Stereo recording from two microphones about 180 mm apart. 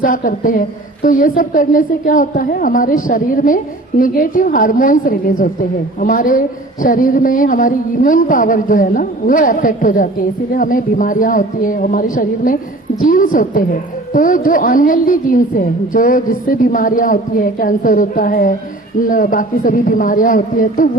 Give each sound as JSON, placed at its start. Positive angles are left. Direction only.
{"t": 0.0, "sound": "a woman's voice", "side_deg": 50}